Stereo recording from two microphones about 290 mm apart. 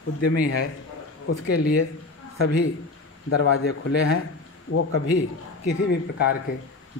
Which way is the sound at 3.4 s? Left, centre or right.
Left.